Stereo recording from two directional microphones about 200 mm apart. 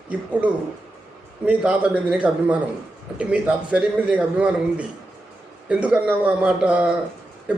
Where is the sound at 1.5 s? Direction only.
5° right (ahead or behind).